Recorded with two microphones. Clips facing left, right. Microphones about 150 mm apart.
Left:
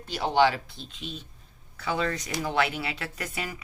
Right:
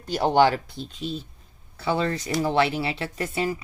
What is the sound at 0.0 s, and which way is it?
Speech, 45° right (ahead or behind).